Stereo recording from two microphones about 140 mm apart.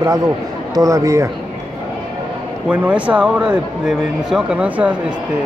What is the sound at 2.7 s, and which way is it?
Speech, 10° right (ahead or behind).